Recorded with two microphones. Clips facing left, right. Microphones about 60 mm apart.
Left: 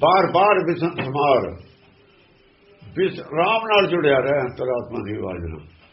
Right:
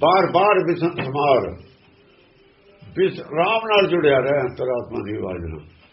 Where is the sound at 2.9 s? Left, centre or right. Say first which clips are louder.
Right 1 dB; centre.